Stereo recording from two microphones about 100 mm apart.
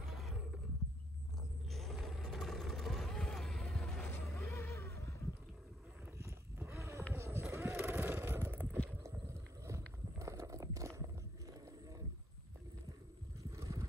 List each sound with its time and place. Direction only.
0.0 s wild animals: centre (ahead or behind)
1.7 s vehicle: centre (ahead or behind)
4.1 s music: 25° left (ahead or behind)
6.1 s livestock: 30° right (ahead or behind)
7.2 s a sound: 30° right (ahead or behind)
7.5 s vehicle: 25° right (ahead or behind)
9.3 s horse: 30° right (ahead or behind)
13.4 s vehicle: 30° right (ahead or behind)